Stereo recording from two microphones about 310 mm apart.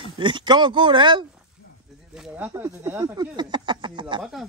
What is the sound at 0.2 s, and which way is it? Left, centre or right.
Speech, centre.